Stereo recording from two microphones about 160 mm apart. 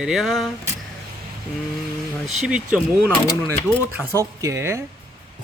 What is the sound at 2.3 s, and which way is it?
Speech, 5° right (ahead or behind).